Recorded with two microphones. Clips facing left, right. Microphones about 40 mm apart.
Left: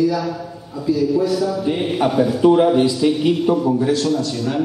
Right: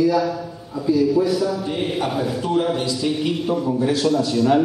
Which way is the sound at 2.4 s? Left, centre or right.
Left.